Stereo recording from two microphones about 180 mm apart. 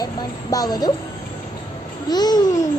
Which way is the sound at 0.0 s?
20° left (ahead or behind).